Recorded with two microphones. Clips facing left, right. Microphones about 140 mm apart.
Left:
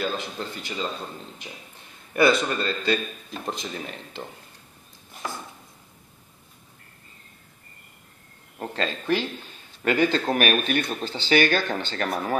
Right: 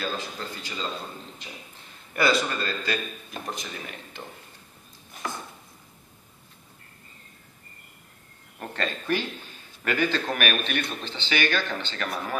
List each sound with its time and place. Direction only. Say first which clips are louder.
0.6 s a man's voice: left 4 dB; 20° left (ahead or behind)
2.1 s a man's voice: left 4 dB; 25° left (ahead or behind)
8.5 s speech: left 3 dB; 25° left (ahead or behind)
9.8 s speech: left 4 dB; 35° left (ahead or behind)